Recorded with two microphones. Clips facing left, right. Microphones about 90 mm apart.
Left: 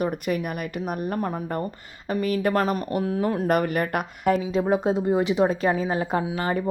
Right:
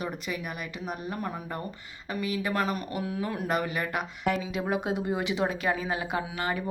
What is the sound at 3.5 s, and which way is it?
Speech, 55° left (ahead or behind).